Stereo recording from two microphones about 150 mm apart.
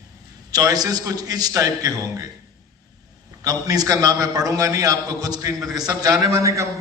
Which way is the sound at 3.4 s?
25° right (ahead or behind).